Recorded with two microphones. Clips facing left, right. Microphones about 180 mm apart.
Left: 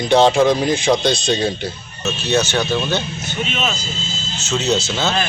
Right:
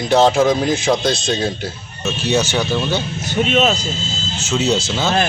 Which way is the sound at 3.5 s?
45° right (ahead or behind).